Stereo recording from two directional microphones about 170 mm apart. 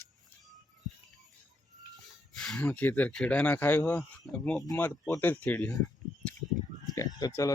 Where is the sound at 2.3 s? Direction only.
5° left (ahead or behind).